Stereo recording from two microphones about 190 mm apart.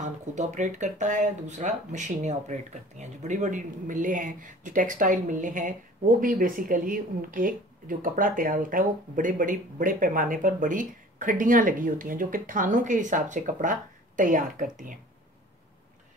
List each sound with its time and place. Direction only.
0.0 s speech: 40° right (ahead or behind)